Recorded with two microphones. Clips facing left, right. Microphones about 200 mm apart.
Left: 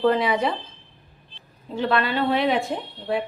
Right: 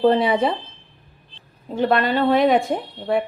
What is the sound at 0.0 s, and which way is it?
Speech, 30° right (ahead or behind).